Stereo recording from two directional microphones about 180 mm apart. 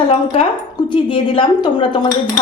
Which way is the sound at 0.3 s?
25° left (ahead or behind).